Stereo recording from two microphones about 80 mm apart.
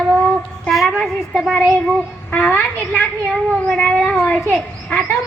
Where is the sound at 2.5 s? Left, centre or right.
Centre.